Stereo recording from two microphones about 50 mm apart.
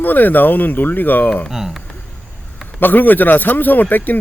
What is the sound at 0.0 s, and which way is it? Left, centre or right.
Speech, left.